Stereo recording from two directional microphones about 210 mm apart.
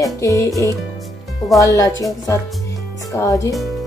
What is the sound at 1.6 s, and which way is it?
Speech, 15° left (ahead or behind).